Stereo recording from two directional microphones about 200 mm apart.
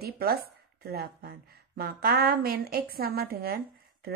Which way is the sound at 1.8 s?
50° right (ahead or behind).